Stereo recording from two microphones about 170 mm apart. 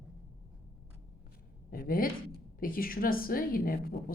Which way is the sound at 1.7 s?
60° left (ahead or behind).